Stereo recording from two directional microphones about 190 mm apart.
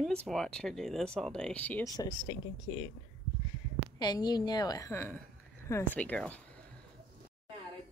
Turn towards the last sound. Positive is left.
turn(degrees=10)  # may be behind; listen again after turning